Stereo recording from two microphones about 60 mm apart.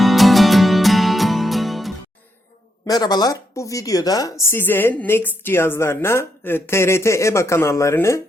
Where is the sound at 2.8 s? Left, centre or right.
Left.